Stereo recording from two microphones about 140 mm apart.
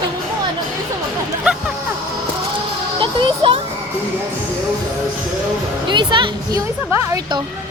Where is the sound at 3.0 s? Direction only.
35° right (ahead or behind).